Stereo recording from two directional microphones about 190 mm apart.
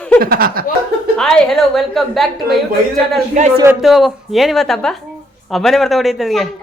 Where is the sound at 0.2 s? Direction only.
50° right (ahead or behind).